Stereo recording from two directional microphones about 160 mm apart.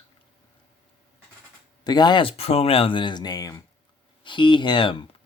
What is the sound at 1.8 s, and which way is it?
Speech, 25° left (ahead or behind).